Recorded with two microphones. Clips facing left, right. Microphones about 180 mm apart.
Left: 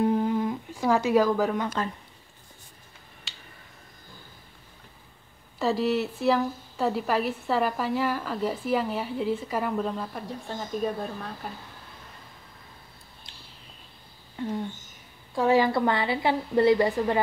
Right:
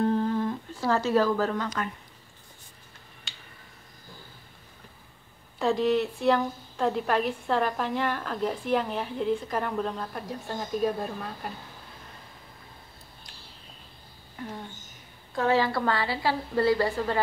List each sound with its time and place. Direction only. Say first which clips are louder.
0.0 s humming: left 1 dB; 10° left (ahead or behind)
3.3 s a sound: even; centre (ahead or behind)
5.6 s a woman's voice: right 1 dB; 5° left (ahead or behind)
14.4 s speech: left 6 dB; 25° left (ahead or behind)
15.3 s a woman's voice: left 3 dB; 15° left (ahead or behind)